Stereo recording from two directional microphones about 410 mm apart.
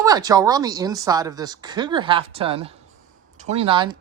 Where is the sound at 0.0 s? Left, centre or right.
Centre.